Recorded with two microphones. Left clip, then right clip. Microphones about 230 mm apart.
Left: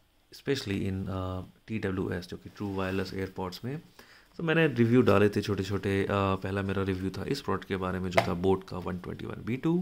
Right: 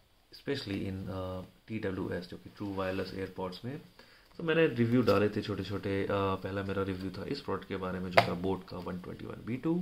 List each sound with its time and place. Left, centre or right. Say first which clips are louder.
0.5 s speech: left 5 dB; left